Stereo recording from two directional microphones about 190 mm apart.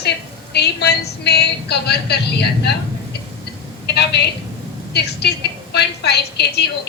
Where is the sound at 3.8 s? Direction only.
60° left (ahead or behind).